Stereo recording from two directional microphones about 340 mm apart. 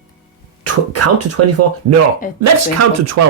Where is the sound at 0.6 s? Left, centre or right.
Right.